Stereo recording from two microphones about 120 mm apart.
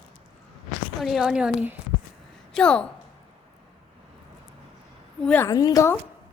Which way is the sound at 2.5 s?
10° left (ahead or behind).